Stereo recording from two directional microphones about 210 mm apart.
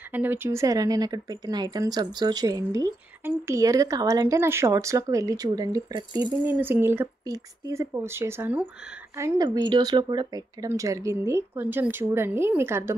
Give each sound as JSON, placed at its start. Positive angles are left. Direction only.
{"t": 0.1, "sound": "speech", "side_deg": -10}